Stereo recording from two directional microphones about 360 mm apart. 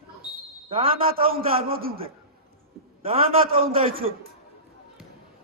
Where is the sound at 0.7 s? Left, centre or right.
Centre.